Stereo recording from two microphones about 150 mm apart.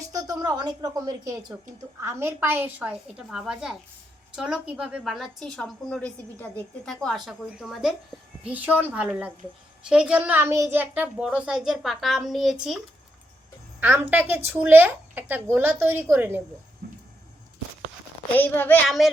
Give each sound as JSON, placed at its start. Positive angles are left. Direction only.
{"t": 0.1, "sound": "a woman's voice", "side_deg": -25}
{"t": 16.8, "sound": "water", "side_deg": -90}
{"t": 18.3, "sound": "a woman's voice", "side_deg": 15}
{"t": 18.9, "sound": "a woman's voice", "side_deg": 0}